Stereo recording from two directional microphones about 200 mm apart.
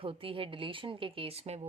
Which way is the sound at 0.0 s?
25° right (ahead or behind).